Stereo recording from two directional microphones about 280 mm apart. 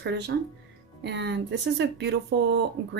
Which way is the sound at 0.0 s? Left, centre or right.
Right.